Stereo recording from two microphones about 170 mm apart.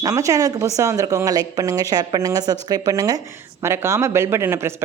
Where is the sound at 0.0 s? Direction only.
20° right (ahead or behind).